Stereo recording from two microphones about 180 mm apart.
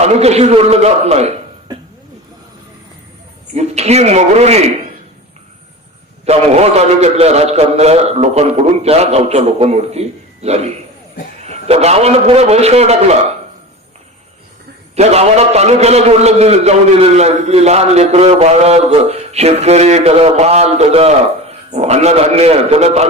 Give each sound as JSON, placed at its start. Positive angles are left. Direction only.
{"t": 0.0, "sound": "a man's voice", "side_deg": -35}
{"t": 3.5, "sound": "a man's voice", "side_deg": -35}
{"t": 6.2, "sound": "a man's voice", "side_deg": -35}
{"t": 14.9, "sound": "a man's voice", "side_deg": -35}